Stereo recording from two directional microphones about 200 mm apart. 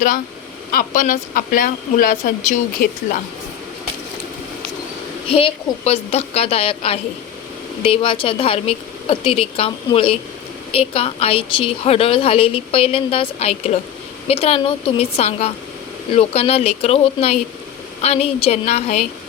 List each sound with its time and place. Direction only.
0.7 s speech: 45° left (ahead or behind)
5.3 s a woman's voice: 30° left (ahead or behind)